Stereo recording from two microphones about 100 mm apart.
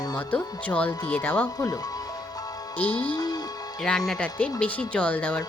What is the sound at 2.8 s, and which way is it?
Speech, 15° left (ahead or behind).